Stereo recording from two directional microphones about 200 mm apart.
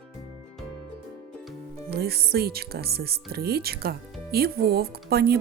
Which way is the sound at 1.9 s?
50° right (ahead or behind).